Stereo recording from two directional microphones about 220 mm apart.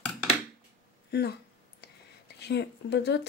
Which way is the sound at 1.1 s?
50° left (ahead or behind).